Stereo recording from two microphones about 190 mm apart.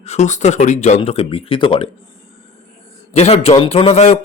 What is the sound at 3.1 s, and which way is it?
Speech, 35° left (ahead or behind).